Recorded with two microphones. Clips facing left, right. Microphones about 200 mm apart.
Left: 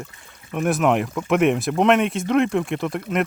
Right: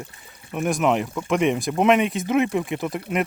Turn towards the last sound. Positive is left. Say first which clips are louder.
# left 1 dB
turn(degrees=-5)  # may be behind; listen again after turning